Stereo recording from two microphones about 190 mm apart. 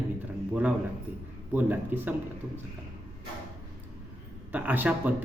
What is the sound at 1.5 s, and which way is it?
Speech, 10° right (ahead or behind).